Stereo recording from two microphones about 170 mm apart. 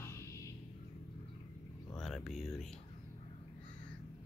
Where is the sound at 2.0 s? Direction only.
Centre (ahead or behind).